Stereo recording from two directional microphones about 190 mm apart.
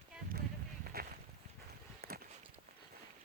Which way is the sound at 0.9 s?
55° right (ahead or behind).